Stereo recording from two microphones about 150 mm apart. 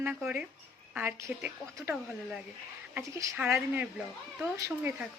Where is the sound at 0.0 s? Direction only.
10° right (ahead or behind).